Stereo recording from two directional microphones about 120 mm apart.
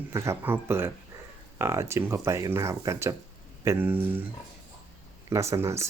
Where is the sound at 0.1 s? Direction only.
20° right (ahead or behind).